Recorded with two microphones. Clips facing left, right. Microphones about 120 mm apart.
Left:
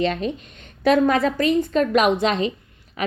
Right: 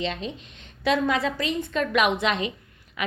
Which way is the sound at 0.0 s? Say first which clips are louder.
Left 7 dB; 50° left (ahead or behind).